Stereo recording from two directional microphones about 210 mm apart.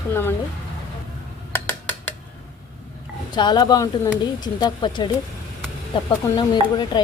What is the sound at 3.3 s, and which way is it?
Speech, 20° left (ahead or behind).